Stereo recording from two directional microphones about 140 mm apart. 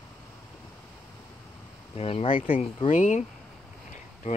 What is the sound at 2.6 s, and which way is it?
Speech, 55° left (ahead or behind).